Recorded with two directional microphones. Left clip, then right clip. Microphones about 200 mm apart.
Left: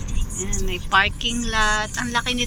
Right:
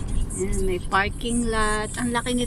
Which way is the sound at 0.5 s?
20° right (ahead or behind).